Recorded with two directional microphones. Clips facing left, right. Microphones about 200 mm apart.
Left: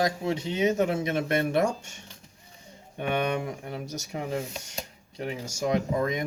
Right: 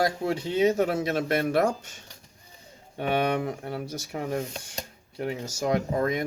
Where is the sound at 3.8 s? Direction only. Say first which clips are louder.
Right 1 dB; 20° left (ahead or behind).